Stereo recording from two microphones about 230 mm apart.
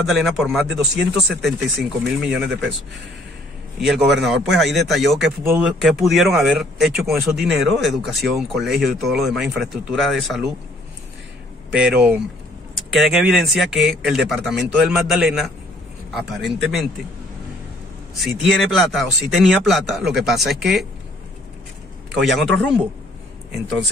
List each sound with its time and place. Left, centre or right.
0.0 s speech: centre
3.8 s speech: centre
11.7 s speech: centre
18.2 s speech: centre
22.1 s speech: centre